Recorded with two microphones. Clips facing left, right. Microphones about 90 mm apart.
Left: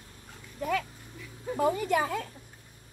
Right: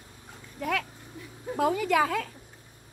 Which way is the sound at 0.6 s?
80° right.